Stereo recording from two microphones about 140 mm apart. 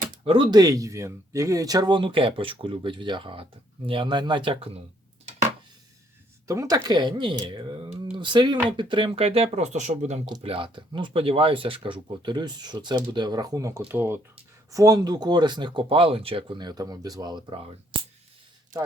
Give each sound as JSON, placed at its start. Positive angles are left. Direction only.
{"t": 0.3, "sound": "speech", "side_deg": -40}
{"t": 0.5, "sound": "speech", "side_deg": -25}
{"t": 6.5, "sound": "speech", "side_deg": -25}
{"t": 10.4, "sound": "speech", "side_deg": -40}
{"t": 14.7, "sound": "speech", "side_deg": -25}